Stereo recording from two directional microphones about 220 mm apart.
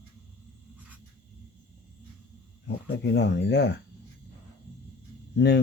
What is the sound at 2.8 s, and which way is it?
Speech, 50° left (ahead or behind).